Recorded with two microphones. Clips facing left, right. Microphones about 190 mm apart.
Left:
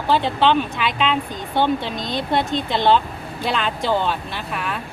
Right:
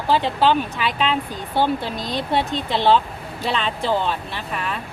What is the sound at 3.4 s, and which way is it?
Speech, centre (ahead or behind).